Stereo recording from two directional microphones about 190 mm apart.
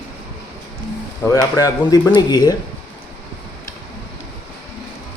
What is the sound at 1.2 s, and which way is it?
Speech, 20° left (ahead or behind).